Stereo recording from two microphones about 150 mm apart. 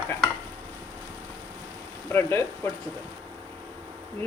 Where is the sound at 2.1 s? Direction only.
15° left (ahead or behind).